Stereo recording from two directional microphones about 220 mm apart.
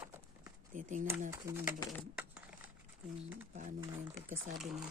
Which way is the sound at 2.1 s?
5° right (ahead or behind).